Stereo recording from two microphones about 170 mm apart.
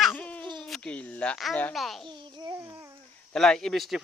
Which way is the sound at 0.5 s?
Centre (ahead or behind).